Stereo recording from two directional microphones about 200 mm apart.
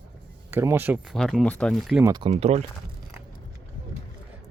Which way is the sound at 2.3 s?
35° right (ahead or behind).